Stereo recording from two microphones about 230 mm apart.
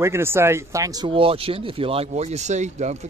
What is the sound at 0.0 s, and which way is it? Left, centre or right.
Speech, centre.